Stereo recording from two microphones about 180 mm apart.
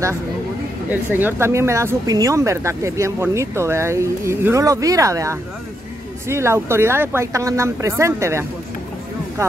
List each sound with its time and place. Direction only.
0.8 s speech: 10° right (ahead or behind)